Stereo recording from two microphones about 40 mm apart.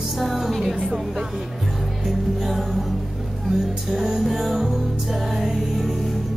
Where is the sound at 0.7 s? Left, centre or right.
Centre.